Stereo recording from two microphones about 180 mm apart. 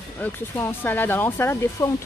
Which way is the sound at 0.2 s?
10° left (ahead or behind).